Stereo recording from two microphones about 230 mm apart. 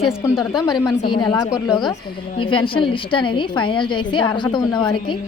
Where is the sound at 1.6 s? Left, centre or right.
Centre.